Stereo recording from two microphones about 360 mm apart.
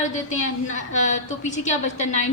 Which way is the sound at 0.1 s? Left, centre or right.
Centre.